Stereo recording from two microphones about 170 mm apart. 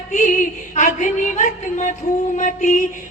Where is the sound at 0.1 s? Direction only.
50° left (ahead or behind).